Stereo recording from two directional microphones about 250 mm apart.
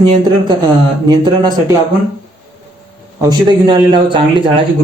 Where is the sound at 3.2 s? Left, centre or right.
Centre.